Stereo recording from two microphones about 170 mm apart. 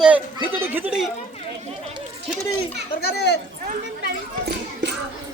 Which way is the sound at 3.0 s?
70° left (ahead or behind).